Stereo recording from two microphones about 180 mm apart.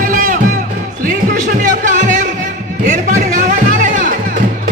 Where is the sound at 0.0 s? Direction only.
50° right (ahead or behind).